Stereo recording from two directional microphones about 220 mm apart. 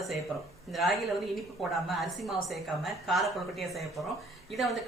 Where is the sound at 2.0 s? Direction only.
Centre (ahead or behind).